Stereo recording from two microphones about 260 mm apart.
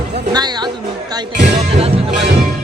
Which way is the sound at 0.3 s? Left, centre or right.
Centre.